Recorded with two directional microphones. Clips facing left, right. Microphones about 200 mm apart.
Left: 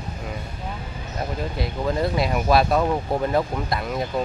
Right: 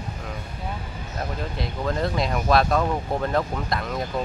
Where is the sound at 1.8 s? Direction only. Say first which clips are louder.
Left 2 dB; 5° left (ahead or behind).